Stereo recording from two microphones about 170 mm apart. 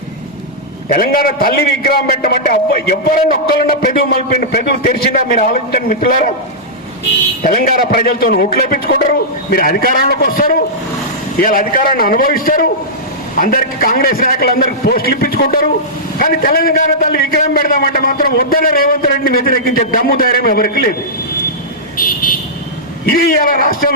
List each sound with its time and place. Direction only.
0.9 s a man's voice: 60° left (ahead or behind)
7.4 s a man's voice: 60° left (ahead or behind)
21.9 s a man's voice: 55° left (ahead or behind)